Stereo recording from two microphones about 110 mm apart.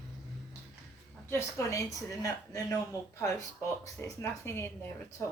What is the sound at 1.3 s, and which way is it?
A woman's voice, 25° left (ahead or behind).